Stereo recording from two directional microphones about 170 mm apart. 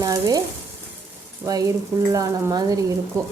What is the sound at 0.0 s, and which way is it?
Stir, 20° right (ahead or behind).